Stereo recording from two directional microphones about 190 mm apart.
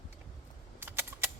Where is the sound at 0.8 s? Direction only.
10° right (ahead or behind).